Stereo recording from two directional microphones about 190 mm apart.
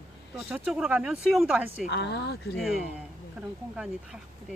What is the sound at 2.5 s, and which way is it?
Speech, centre (ahead or behind).